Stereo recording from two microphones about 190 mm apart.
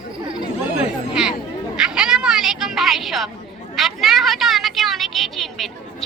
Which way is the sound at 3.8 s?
Centre (ahead or behind).